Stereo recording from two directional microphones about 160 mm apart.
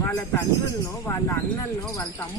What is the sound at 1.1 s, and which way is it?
A woman's voice, 15° left (ahead or behind).